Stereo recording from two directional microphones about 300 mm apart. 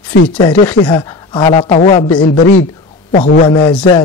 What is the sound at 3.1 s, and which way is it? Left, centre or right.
Speech, left.